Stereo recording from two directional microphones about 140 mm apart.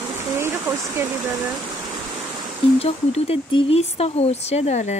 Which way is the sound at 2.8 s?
45° left (ahead or behind).